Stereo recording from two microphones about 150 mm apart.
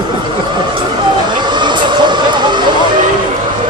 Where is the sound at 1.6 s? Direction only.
30° right (ahead or behind).